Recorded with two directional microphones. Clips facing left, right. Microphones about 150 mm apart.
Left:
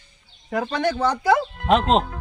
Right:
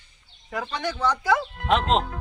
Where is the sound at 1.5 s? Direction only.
Centre (ahead or behind).